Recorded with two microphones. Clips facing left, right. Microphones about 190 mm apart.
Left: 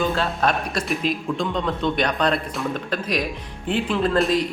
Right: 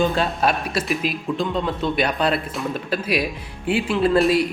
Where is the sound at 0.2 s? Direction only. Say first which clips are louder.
Right 1 dB; 5° right (ahead or behind).